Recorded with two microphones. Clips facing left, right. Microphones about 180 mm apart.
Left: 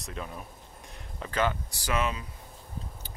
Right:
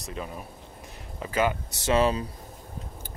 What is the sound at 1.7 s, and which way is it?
Speech, 25° right (ahead or behind).